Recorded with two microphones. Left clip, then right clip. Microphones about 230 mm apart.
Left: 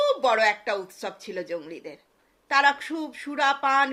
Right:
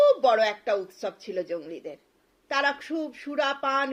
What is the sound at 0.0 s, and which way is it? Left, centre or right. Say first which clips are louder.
Speech: right 1 dB; centre.